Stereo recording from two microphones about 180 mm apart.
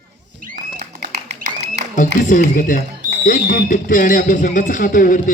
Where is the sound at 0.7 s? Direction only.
65° right (ahead or behind).